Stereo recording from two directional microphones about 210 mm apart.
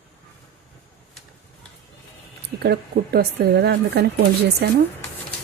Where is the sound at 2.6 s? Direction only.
50° right (ahead or behind).